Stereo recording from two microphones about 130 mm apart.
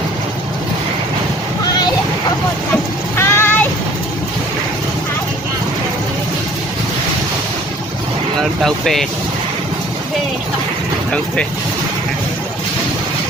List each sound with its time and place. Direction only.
3.2 s vehicle: 20° left (ahead or behind)
8.6 s speech: centre (ahead or behind)